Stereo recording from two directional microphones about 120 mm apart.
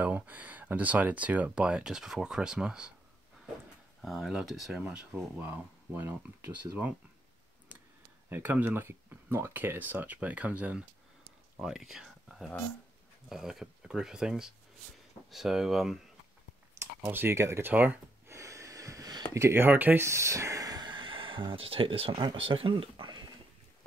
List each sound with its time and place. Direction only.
0.0 s speech: 10° right (ahead or behind)
4.0 s speech: centre (ahead or behind)
8.3 s speech: 15° right (ahead or behind)
16.7 s speech: 20° right (ahead or behind); by 23.2 s 40° right (ahead or behind)